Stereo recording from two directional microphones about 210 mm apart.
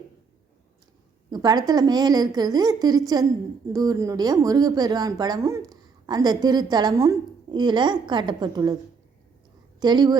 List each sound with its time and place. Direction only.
1.3 s a woman's voice: 20° right (ahead or behind)
9.8 s a woman's voice: 20° right (ahead or behind)